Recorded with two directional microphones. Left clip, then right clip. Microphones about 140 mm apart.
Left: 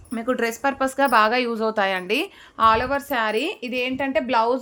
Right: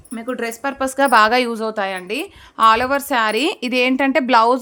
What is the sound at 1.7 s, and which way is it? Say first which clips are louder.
Speech: left 1 dB; centre (ahead or behind).